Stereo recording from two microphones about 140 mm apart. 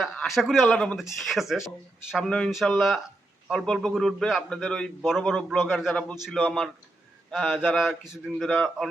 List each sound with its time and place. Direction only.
0.0 s a man's voice: centre (ahead or behind)